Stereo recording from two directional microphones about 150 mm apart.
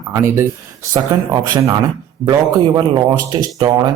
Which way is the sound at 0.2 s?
20° right (ahead or behind).